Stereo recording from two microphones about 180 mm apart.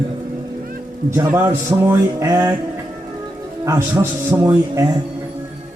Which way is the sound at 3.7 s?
15° right (ahead or behind).